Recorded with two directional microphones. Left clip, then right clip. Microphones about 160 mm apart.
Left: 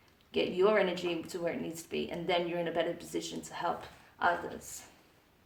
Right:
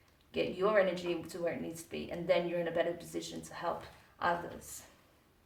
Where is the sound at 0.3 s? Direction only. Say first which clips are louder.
Left 4 dB; 25° left (ahead or behind).